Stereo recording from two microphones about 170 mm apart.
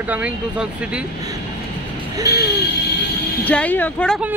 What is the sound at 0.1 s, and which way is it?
Speech, 5° right (ahead or behind).